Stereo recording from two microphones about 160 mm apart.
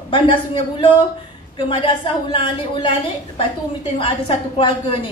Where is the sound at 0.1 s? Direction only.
30° left (ahead or behind).